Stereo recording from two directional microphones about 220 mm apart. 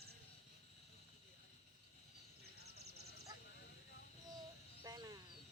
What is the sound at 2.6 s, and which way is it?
Clip-clop, 45° right (ahead or behind).